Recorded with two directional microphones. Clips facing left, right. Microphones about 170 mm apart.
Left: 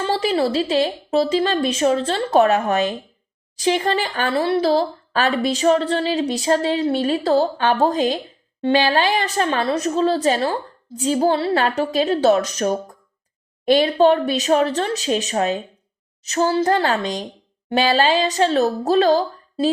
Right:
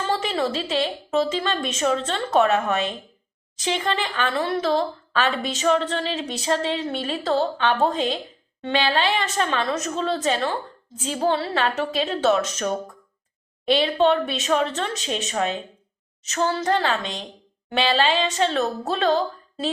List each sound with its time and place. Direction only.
0.1 s speech: 35° left (ahead or behind)